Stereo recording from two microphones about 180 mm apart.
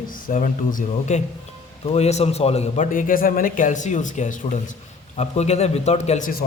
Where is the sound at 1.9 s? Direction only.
35° left (ahead or behind).